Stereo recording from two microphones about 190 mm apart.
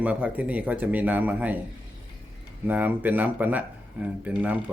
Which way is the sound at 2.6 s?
10° right (ahead or behind).